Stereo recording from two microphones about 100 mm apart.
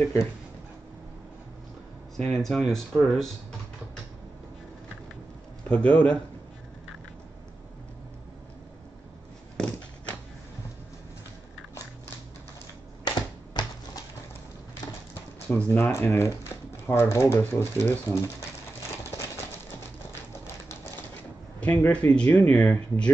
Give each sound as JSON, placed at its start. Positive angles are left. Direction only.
{"t": 2.1, "sound": "speech", "side_deg": 5}
{"t": 5.7, "sound": "speech", "side_deg": 10}
{"t": 9.6, "sound": "a sound", "side_deg": 10}
{"t": 13.0, "sound": "typewriter", "side_deg": 45}
{"t": 15.5, "sound": "speech", "side_deg": 20}
{"t": 21.5, "sound": "speech", "side_deg": 15}